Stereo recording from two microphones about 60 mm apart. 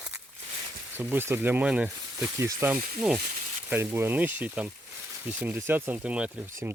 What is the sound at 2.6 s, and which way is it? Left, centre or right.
Speech, right.